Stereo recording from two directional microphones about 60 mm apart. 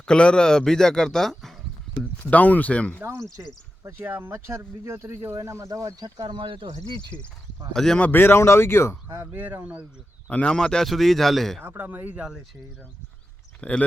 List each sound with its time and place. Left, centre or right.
0.0 s a man's voice: centre
2.3 s speech: left
3.4 s speech: right
5.3 s speech: right
7.1 s a man's voice: centre
7.7 s a man's voice: centre
8.1 s speech: left
9.3 s speech: right
10.2 s speech: left; by 11.6 s centre
11.6 s speech: right
13.6 s speech: left